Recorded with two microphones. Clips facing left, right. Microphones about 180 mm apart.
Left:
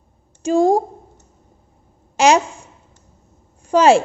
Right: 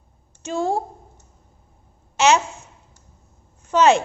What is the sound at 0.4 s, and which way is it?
Speech, 35° left (ahead or behind).